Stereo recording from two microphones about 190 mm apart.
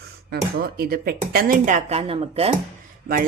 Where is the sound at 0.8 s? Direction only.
50° right (ahead or behind); by 2.6 s 30° right (ahead or behind).